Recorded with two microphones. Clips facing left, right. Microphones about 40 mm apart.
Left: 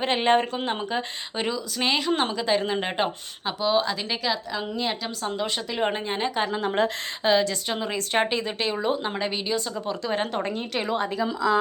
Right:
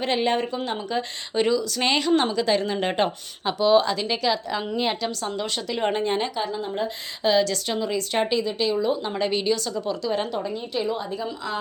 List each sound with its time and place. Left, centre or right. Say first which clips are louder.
0.0 s speech: left 2 dB; left
1.4 s speech: right 7 dB; centre
1.8 s speech: left 1 dB; centre
2.3 s speech: right 1 dB; centre
5.4 s speech: even; centre
6.3 s speech: left 2 dB; left
6.6 s a woman's voice: left 4 dB; left
7.2 s a woman's voice: right 1 dB; left
7.8 s speech: even; left
9.1 s speech: right 4 dB; centre
9.7 s speech: right 2 dB; left
10.4 s a woman's voice: right 1 dB; left